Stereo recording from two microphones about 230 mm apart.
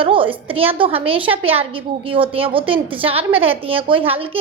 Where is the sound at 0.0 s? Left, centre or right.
Right.